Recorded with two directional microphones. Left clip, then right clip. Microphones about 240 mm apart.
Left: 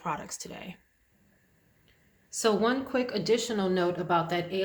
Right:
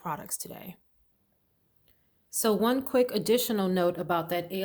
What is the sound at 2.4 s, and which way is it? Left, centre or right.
A woman's voice, right.